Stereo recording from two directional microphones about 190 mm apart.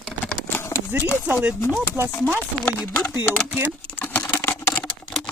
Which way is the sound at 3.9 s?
10° left (ahead or behind).